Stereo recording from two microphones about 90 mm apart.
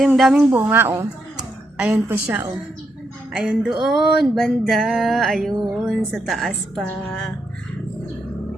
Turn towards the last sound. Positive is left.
turn(degrees=10)  # may be behind; listen again after turning